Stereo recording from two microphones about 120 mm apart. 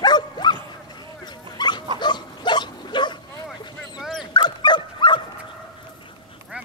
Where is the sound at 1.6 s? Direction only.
40° left (ahead or behind).